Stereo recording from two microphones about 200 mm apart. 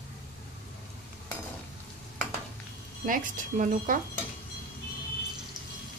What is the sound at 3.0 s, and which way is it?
Stir, 40° right (ahead or behind).